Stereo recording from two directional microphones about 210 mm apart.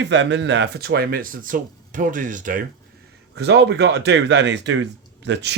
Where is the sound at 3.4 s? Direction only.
55° right (ahead or behind).